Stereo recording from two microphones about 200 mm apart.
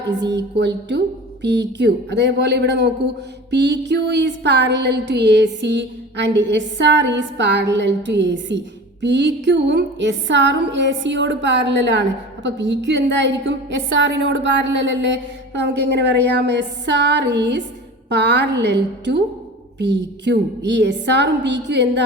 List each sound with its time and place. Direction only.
0.1 s music: 60° right (ahead or behind)